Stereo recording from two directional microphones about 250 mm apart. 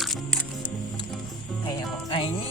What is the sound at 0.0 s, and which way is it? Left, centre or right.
Music, centre.